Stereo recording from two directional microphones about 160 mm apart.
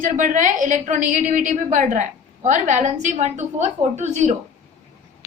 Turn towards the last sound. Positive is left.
turn(degrees=-45)  # may be behind; listen again after turning